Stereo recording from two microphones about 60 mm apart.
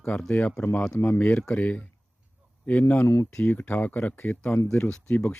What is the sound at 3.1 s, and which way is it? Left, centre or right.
Speech, left.